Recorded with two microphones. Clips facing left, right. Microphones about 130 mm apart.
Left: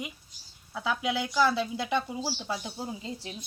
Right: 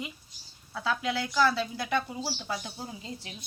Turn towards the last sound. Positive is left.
turn(degrees=30)  # may be behind; listen again after turning